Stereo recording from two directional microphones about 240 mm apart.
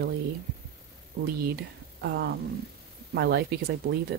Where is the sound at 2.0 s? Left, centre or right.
Right.